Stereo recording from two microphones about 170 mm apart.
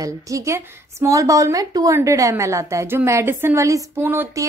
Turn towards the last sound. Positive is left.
turn(degrees=-15)  # may be behind; listen again after turning